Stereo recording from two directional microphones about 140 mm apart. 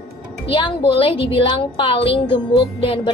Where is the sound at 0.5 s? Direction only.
40° left (ahead or behind).